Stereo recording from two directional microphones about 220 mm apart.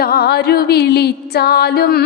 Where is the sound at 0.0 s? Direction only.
45° left (ahead or behind).